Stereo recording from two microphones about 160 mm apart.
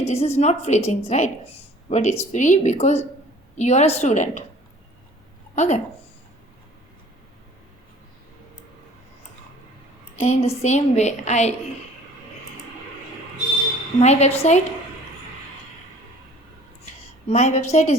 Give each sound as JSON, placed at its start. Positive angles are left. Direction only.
{"t": 0.0, "sound": "speech", "side_deg": 40}
{"t": 5.5, "sound": "speech", "side_deg": 45}
{"t": 10.2, "sound": "speech", "side_deg": 45}
{"t": 14.0, "sound": "speech", "side_deg": 45}
{"t": 16.8, "sound": "a sound", "side_deg": 45}